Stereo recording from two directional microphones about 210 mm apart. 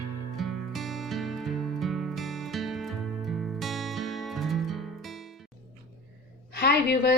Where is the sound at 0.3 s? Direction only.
Centre (ahead or behind).